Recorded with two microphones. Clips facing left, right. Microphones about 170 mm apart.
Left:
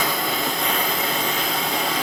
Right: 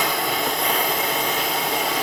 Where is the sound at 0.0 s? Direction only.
15° right (ahead or behind).